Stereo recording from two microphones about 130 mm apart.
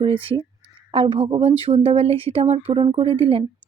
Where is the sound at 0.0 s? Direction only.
45° right (ahead or behind).